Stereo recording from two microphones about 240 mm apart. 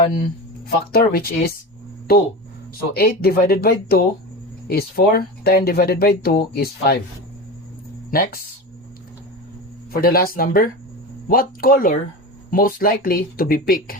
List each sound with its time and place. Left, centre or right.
0.9 s speech: left
8.1 s speech: left
9.9 s speech: left